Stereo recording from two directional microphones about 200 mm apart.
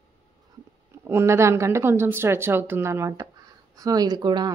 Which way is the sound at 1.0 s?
15° right (ahead or behind).